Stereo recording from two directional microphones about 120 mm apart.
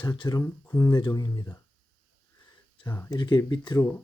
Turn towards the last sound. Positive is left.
turn(degrees=35)  # may be behind; listen again after turning